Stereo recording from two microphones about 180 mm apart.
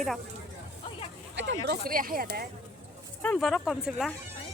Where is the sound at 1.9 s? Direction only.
50° right (ahead or behind).